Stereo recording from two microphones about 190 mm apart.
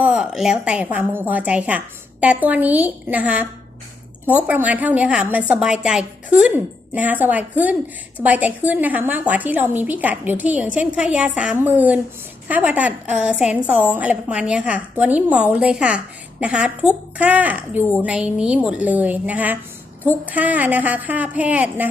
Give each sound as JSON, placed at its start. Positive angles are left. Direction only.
{"t": 0.0, "sound": "a woman's voice", "side_deg": -5}